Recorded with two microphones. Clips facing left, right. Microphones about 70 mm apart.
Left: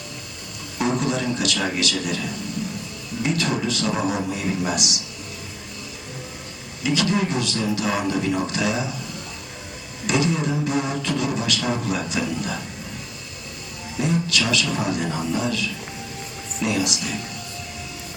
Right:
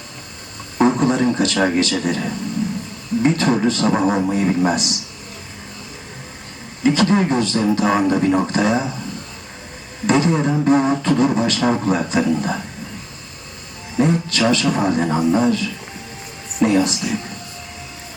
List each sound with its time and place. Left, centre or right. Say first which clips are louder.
0.8 s beatboxing: right 7 dB; right
6.8 s beatboxing: right 6 dB; right
10.1 s beatboxing: right 5 dB; right
14.0 s beatboxing: right 6 dB; right